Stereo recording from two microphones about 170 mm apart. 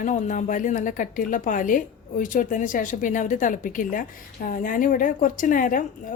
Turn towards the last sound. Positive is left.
turn(degrees=50)  # may be behind; listen again after turning